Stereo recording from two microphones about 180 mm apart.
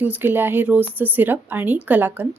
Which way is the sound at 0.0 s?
10° right (ahead or behind).